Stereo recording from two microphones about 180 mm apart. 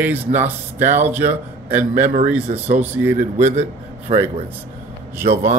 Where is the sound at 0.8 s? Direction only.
40° right (ahead or behind).